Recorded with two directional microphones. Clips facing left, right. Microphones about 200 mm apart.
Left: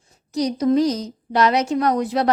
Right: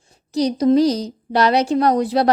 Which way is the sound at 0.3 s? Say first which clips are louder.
Right 3 dB; 30° right (ahead or behind).